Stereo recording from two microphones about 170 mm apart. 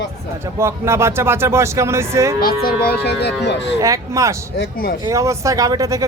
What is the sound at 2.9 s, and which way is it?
Speech, 75° left (ahead or behind).